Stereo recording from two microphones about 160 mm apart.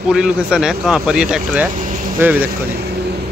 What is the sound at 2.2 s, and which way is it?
Speech, 10° right (ahead or behind).